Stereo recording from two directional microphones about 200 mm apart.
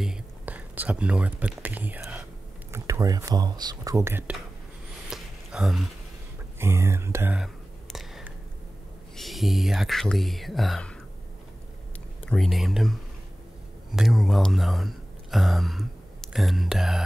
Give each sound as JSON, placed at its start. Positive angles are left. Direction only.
{"t": 0.0, "sound": "speech", "side_deg": -5}
{"t": 5.1, "sound": "a sound", "side_deg": 0}
{"t": 6.6, "sound": "whispering", "side_deg": -10}
{"t": 9.1, "sound": "speech", "side_deg": 0}
{"t": 12.3, "sound": "speech", "side_deg": 0}
{"t": 13.9, "sound": "speech", "side_deg": 0}